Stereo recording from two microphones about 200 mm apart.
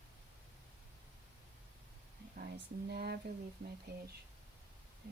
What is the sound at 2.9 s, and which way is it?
Speech, 55° right (ahead or behind).